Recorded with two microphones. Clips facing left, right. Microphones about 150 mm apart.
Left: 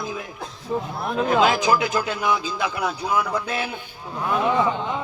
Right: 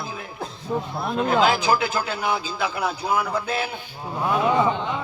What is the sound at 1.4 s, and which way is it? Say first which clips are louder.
A man's voice: left 1 dB; 30° right (ahead or behind).